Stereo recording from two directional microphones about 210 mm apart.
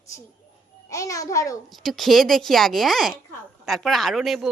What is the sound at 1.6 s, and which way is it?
A woman's voice, centre (ahead or behind).